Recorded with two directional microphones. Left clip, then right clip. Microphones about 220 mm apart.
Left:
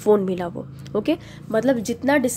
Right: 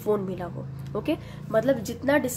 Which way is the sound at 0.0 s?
30° left (ahead or behind).